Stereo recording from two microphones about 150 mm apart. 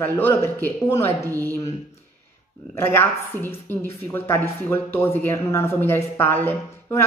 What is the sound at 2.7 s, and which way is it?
Speech, 15° left (ahead or behind).